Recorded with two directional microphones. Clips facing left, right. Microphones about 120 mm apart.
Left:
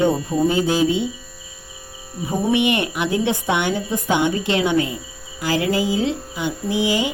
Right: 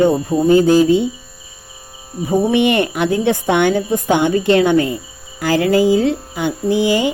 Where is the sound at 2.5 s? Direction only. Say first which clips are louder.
Right 5 dB; 50° right (ahead or behind).